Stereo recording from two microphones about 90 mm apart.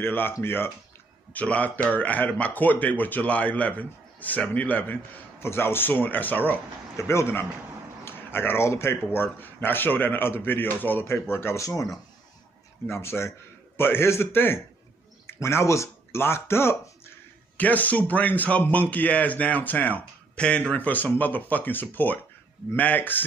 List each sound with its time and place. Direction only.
0.0 s a man's voice: 25° left (ahead or behind)
7.0 s a man's voice: 30° left (ahead or behind)
17.6 s a man's voice: 20° left (ahead or behind)